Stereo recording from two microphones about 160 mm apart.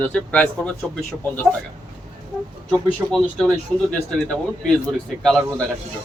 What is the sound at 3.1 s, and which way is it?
Speech, centre (ahead or behind).